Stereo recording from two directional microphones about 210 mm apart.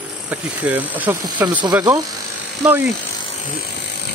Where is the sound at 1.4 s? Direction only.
20° right (ahead or behind).